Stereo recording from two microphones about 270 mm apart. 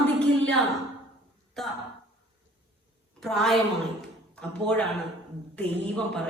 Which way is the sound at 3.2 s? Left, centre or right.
Centre.